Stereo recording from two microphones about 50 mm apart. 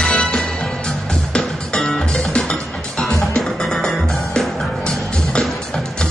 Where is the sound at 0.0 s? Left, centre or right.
Centre.